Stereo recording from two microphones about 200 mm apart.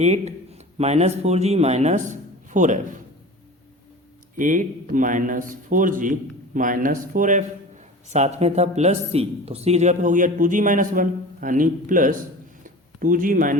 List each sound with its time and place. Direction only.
0.0 s a man's voice: 35° right (ahead or behind)
4.4 s a man's voice: 40° right (ahead or behind)
12.6 s a sound: 45° right (ahead or behind)